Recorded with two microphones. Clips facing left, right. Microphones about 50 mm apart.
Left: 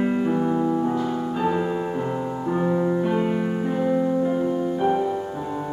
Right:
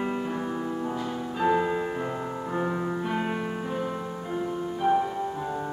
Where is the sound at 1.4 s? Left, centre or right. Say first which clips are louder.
Right 1 dB; centre.